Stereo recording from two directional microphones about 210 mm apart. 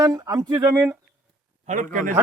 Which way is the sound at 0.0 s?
15° right (ahead or behind).